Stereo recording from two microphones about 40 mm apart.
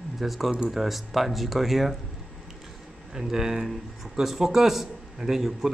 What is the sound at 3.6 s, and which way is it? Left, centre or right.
A man's voice, centre.